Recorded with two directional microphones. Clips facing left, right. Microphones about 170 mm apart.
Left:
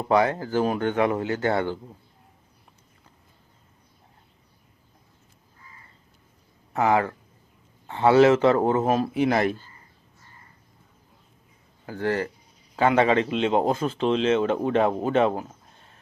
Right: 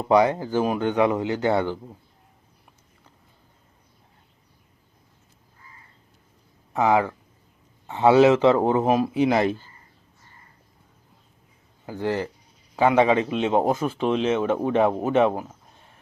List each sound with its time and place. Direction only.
0.0 s speech: 20° right (ahead or behind)
6.7 s speech: 15° right (ahead or behind)
11.9 s speech: 15° right (ahead or behind)